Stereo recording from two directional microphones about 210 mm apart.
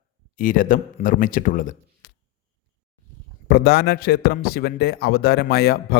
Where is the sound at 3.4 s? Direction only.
45° left (ahead or behind).